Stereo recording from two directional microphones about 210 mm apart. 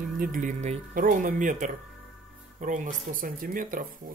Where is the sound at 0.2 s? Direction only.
40° right (ahead or behind).